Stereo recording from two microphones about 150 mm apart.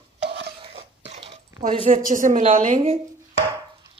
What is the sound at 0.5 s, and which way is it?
Cough, 40° right (ahead or behind).